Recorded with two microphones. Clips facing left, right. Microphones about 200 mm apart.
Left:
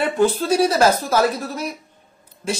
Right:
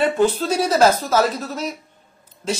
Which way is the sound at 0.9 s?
15° left (ahead or behind).